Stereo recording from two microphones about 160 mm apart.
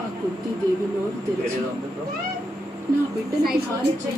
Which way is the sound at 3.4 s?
75° right (ahead or behind).